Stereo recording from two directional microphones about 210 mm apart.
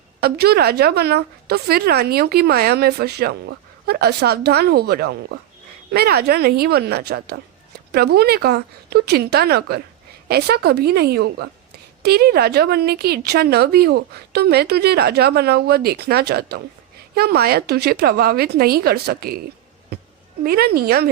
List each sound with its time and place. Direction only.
0.2 s a woman's voice: 50° right (ahead or behind)
20.4 s a woman's voice: 45° right (ahead or behind)